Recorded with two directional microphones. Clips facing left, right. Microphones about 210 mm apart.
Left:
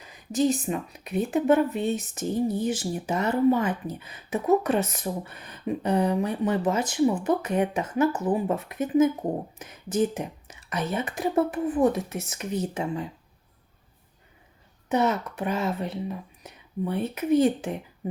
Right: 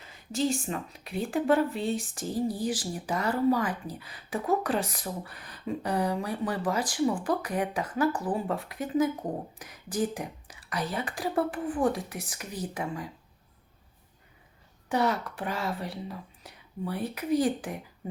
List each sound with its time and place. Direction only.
0.0 s speech: 20° left (ahead or behind)
14.8 s speech: 20° left (ahead or behind)